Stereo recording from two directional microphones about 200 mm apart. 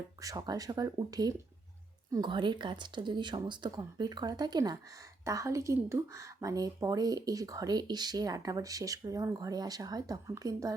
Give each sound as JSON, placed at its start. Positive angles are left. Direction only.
{"t": 0.2, "sound": "speech", "side_deg": -15}